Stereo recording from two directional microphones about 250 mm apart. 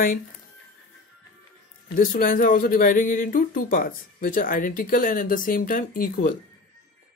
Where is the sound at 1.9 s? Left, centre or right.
Left.